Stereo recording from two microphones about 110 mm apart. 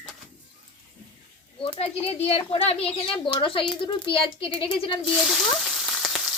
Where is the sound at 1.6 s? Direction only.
60° left (ahead or behind).